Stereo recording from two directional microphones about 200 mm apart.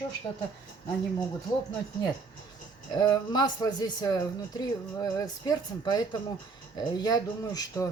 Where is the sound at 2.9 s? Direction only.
20° left (ahead or behind).